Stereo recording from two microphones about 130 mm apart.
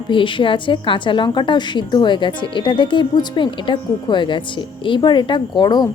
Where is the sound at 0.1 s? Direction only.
40° left (ahead or behind).